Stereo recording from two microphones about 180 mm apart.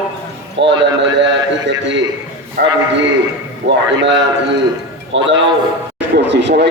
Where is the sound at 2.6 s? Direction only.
60° right (ahead or behind).